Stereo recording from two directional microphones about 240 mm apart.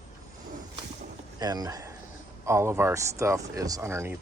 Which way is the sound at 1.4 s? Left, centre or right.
Centre.